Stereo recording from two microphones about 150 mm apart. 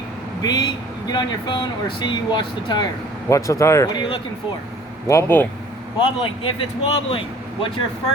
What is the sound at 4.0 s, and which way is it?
Speech, 35° left (ahead or behind).